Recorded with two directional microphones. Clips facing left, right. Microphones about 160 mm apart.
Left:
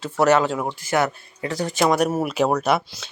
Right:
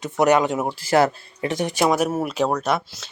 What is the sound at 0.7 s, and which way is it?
Speech, 30° right (ahead or behind).